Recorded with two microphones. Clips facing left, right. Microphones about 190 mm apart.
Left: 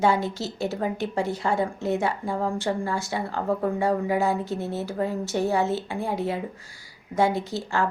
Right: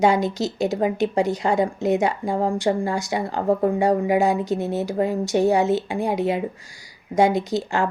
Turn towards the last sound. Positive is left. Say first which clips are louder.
# right 4 dB
turn(degrees=-15)  # may be behind; listen again after turning